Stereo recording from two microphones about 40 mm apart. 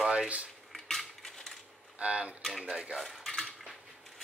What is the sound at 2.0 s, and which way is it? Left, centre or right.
Speech, right.